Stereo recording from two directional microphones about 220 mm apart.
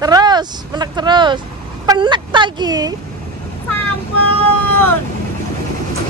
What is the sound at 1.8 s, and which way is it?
Speech, 20° right (ahead or behind).